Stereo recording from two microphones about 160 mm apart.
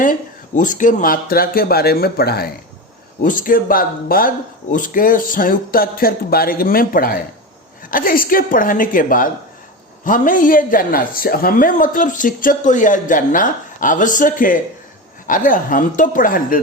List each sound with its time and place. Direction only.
0.0 s speech: 55° left (ahead or behind); by 2.6 s 75° left (ahead or behind)
3.2 s a woman's voice: 55° left (ahead or behind)